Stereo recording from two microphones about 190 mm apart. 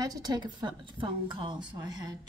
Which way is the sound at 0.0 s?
20° right (ahead or behind).